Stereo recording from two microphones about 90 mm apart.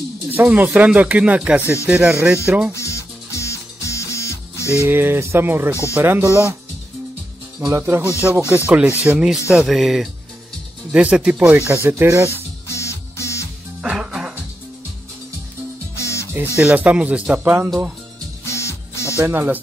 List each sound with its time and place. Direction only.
0.3 s speech: 20° right (ahead or behind)
2.7 s music: 35° left (ahead or behind)
4.8 s speech: 25° right (ahead or behind)
6.2 s speech: 30° left (ahead or behind)
7.7 s speech: 25° right (ahead or behind)
8.5 s speech: 15° right (ahead or behind)
10.9 s speech: 15° right (ahead or behind); by 12.3 s 30° right (ahead or behind)
12.3 s music: 30° left (ahead or behind)
13.8 s music: 10° right (ahead or behind)
16.0 s music: 35° left (ahead or behind)
16.5 s speech: 15° right (ahead or behind)
18.4 s music: 30° left (ahead or behind)
19.1 s speech: 25° right (ahead or behind)